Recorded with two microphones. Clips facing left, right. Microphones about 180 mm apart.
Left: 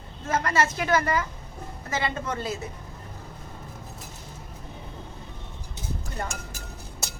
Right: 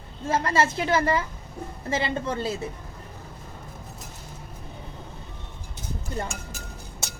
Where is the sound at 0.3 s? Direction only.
30° right (ahead or behind).